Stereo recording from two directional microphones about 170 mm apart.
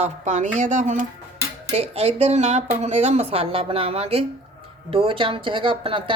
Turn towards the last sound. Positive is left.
turn(degrees=-30)  # may be behind; listen again after turning